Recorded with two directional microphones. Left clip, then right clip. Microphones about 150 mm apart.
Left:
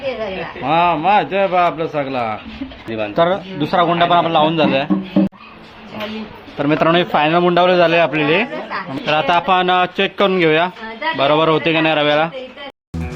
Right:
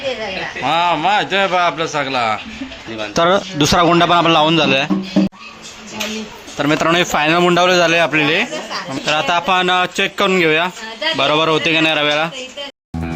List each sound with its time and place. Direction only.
0.6 s a man's voice: 5° left (ahead or behind)
3.2 s a man's voice: 25° right (ahead or behind)
6.6 s a man's voice: 10° right (ahead or behind)